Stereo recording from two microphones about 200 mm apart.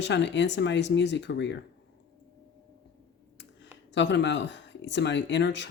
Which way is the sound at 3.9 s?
65° left (ahead or behind).